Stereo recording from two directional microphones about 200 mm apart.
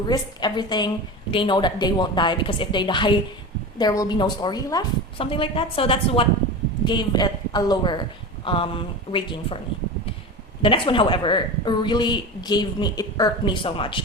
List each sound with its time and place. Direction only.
0.1 s speech: 20° left (ahead or behind)
10.6 s speech: 25° left (ahead or behind)